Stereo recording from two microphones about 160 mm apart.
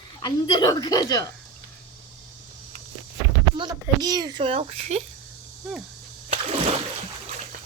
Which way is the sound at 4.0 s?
25° right (ahead or behind).